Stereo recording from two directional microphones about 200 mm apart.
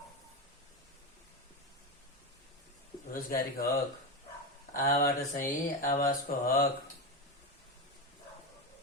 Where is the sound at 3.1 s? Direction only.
45° left (ahead or behind).